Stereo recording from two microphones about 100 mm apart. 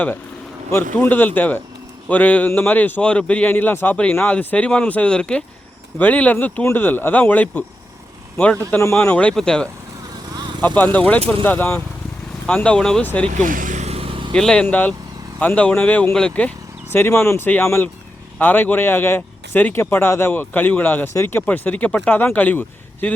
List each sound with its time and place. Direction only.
0.7 s a man's voice: 20° left (ahead or behind)
10.8 s a man's voice: 15° left (ahead or behind)
12.5 s a man's voice: 10° left (ahead or behind)
13.8 s vehicle: 75° right (ahead or behind); by 14.3 s 60° right (ahead or behind)
14.3 s a man's voice: 10° left (ahead or behind)
16.9 s speech: 25° left (ahead or behind)